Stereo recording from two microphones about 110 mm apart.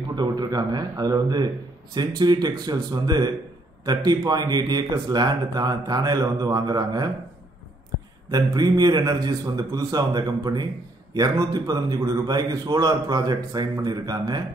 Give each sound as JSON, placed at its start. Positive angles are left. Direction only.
{"t": 0.1, "sound": "speech", "side_deg": -40}
{"t": 8.3, "sound": "speech", "side_deg": -35}